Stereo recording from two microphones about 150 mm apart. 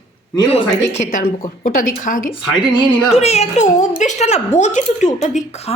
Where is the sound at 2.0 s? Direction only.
60° left (ahead or behind).